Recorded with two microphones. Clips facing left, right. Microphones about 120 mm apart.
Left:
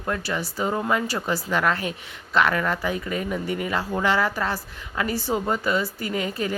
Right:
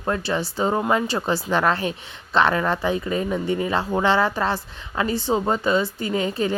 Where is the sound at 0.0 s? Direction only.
30° right (ahead or behind).